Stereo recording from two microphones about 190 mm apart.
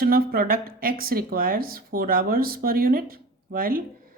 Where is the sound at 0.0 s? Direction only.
50° right (ahead or behind).